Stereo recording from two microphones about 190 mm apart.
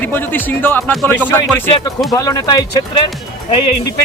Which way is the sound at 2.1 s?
20° left (ahead or behind).